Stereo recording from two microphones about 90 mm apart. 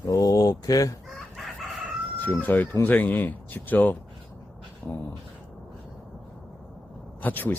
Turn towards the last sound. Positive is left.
turn(degrees=20)  # may be behind; listen again after turning